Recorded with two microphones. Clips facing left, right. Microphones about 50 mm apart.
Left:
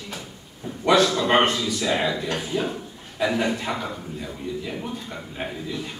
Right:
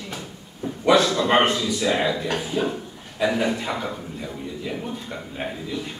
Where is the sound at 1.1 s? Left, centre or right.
Centre.